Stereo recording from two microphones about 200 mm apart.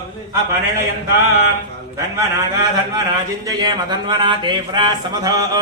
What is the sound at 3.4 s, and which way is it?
Speech, 20° right (ahead or behind).